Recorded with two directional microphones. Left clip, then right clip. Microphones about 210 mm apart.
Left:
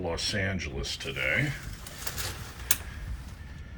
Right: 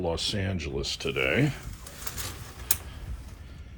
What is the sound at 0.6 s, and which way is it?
Speech, 90° right.